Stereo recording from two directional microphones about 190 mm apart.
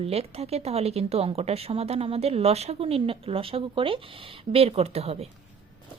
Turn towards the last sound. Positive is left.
turn(degrees=-30)  # may be behind; listen again after turning